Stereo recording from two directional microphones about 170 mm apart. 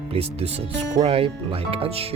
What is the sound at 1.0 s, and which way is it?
Speech, 35° right (ahead or behind).